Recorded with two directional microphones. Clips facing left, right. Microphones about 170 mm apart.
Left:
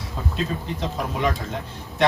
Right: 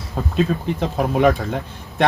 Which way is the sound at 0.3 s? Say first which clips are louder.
Right 9 dB; 55° right (ahead or behind).